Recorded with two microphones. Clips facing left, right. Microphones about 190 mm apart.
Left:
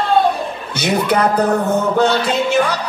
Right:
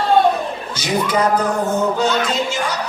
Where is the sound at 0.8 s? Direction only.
65° left (ahead or behind).